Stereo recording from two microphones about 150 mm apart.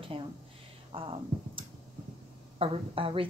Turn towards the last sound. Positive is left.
turn(degrees=-35)  # may be behind; listen again after turning